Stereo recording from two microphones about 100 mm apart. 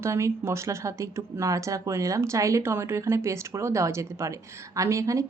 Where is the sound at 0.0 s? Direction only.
30° right (ahead or behind).